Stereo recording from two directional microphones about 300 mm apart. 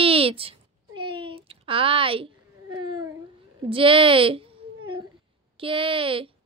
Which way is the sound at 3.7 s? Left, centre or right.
Centre.